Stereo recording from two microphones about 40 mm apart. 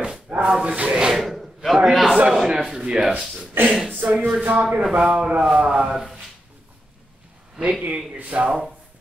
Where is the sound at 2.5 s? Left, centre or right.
Centre.